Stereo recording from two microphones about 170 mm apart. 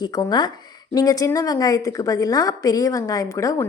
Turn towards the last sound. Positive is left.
turn(degrees=20)  # may be behind; listen again after turning